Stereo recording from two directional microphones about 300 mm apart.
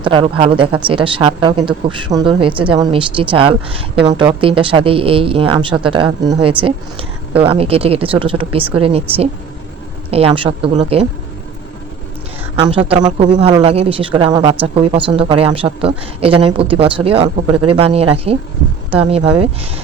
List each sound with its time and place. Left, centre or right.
0.0 s speech: centre
12.6 s speech: centre